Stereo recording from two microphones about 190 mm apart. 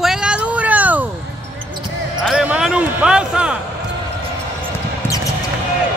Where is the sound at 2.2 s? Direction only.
5° right (ahead or behind).